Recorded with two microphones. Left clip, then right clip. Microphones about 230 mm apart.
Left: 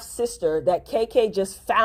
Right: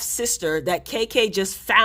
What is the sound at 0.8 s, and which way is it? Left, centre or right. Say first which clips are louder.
Speech: even; right.